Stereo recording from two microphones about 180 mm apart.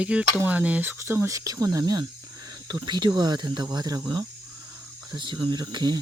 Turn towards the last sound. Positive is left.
turn(degrees=-25)  # may be behind; listen again after turning